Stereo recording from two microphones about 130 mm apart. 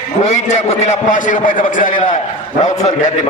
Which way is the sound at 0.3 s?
60° left (ahead or behind).